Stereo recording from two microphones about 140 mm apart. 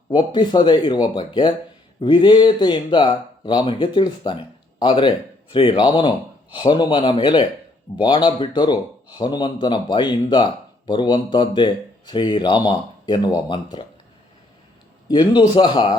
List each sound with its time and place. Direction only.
0.1 s a man's voice: 35° left (ahead or behind)
15.0 s a man's voice: 30° left (ahead or behind)